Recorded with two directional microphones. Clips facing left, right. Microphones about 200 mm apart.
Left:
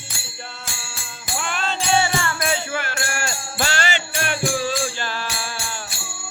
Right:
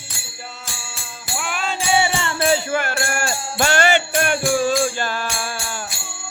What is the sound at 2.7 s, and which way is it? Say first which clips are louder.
Music: right 5 dB; 45° right (ahead or behind).